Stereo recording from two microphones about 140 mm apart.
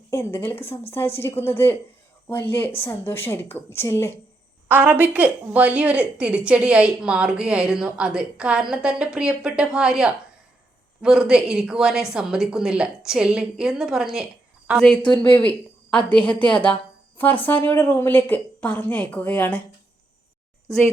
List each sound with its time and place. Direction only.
0.1 s a woman's voice: 15° left (ahead or behind)
4.7 s a woman's voice: 10° right (ahead or behind)
14.8 s a woman's voice: 5° left (ahead or behind)